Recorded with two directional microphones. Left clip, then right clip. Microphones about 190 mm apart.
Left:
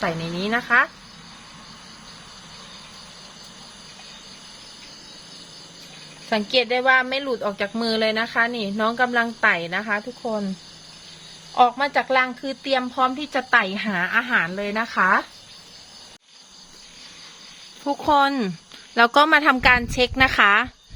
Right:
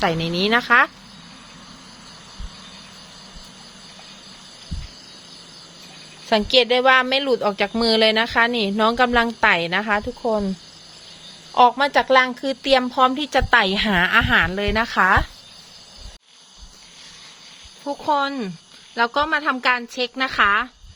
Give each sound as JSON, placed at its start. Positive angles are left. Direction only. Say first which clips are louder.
{"t": 0.0, "sound": "speech", "louder": "right 5 dB", "side_deg": -50}
{"t": 6.2, "sound": "speech", "louder": "right 4 dB", "side_deg": -50}
{"t": 11.5, "sound": "speech", "louder": "right 3 dB", "side_deg": -50}
{"t": 17.8, "sound": "a woman's voice", "louder": "left 3 dB", "side_deg": 20}
{"t": 18.9, "sound": "a woman's voice", "louder": "left 4 dB", "side_deg": 25}